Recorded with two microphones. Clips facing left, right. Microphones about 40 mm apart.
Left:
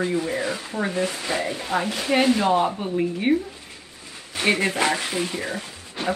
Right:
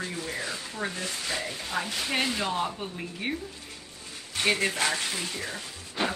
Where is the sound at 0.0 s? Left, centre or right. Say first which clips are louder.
Left 9 dB; left.